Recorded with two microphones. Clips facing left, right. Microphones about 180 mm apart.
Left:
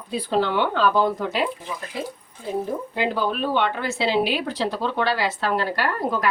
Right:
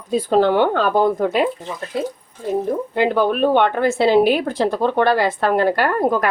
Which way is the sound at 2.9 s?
55° right (ahead or behind).